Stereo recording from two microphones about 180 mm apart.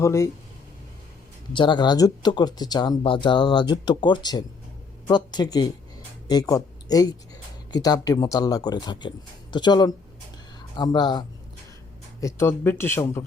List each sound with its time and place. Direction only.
0.0 s speech: 15° left (ahead or behind)
1.5 s speech: 25° left (ahead or behind)
12.2 s speech: 15° left (ahead or behind)